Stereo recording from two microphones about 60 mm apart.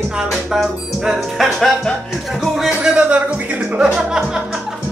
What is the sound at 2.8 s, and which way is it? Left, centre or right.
Speech, centre.